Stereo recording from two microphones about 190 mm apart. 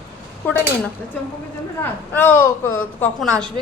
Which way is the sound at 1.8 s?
10° left (ahead or behind).